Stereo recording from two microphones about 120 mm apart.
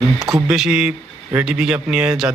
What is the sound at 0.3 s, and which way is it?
Speech, 5° right (ahead or behind).